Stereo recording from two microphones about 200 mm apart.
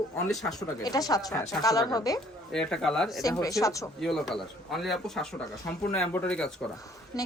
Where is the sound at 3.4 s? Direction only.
15° left (ahead or behind).